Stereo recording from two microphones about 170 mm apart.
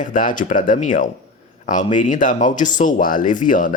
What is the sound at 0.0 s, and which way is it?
Speech, 50° left (ahead or behind).